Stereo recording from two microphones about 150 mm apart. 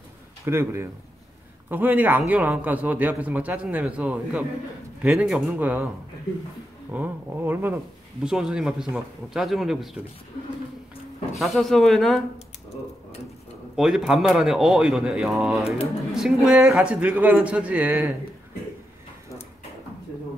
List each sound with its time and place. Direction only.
0.5 s a man's voice: 15° right (ahead or behind)
6.9 s speech: 10° right (ahead or behind)
11.3 s speech: centre (ahead or behind)
13.7 s a man's voice: 5° right (ahead or behind)